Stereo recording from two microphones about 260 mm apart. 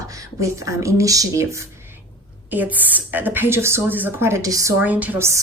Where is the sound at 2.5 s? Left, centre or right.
Centre.